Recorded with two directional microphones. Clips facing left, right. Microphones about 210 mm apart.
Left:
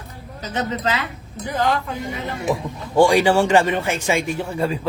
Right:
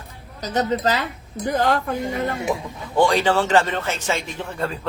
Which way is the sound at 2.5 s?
Centre (ahead or behind).